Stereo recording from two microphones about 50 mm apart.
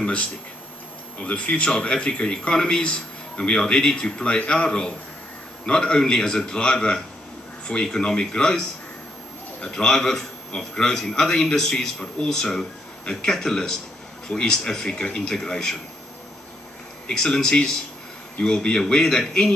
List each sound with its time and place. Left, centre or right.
0.0 s a man's voice: left
17.1 s a man's voice: centre